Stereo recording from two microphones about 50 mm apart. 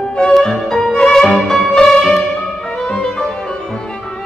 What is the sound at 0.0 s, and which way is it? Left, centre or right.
Music, centre.